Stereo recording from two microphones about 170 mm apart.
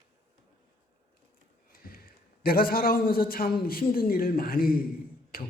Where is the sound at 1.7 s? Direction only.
60° left (ahead or behind).